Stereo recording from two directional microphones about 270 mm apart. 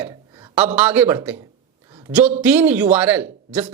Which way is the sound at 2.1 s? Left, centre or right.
Centre.